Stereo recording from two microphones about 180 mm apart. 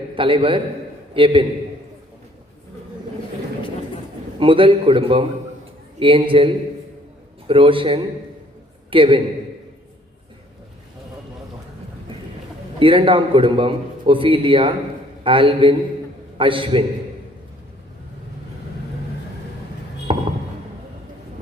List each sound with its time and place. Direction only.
0.2 s a man's voice: 30° right (ahead or behind)
4.4 s a man's voice: 30° right (ahead or behind)
12.8 s a man's voice: 30° right (ahead or behind)
20.1 s a sound: 30° right (ahead or behind)